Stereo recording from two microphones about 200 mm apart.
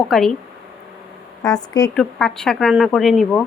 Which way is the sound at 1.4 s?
20° left (ahead or behind).